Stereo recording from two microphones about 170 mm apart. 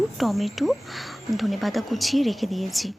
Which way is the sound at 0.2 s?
Centre (ahead or behind).